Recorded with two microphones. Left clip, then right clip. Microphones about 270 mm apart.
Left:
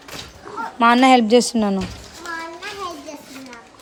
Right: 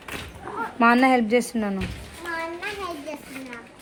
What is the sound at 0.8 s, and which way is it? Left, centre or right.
A woman's voice, centre.